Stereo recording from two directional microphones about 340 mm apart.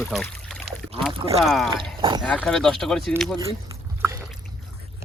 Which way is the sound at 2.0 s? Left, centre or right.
Centre.